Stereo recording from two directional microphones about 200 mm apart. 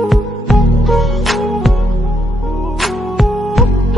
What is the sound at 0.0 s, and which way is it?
Music, centre (ahead or behind).